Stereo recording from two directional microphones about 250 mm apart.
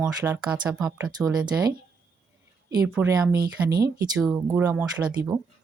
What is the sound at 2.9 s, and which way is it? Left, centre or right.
Speech, centre.